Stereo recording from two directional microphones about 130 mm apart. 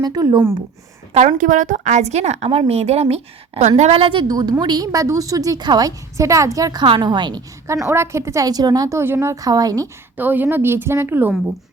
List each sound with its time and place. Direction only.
0.0 s a woman's voice: 30° right (ahead or behind)
1.1 s a woman's voice: 70° right (ahead or behind); by 6.8 s 30° right (ahead or behind)
6.8 s a woman's voice: 40° right (ahead or behind)
7.7 s a woman's voice: 20° right (ahead or behind)
10.2 s a woman's voice: 15° right (ahead or behind)